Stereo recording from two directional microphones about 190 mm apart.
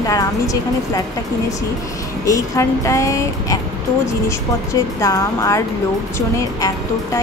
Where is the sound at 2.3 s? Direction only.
15° left (ahead or behind).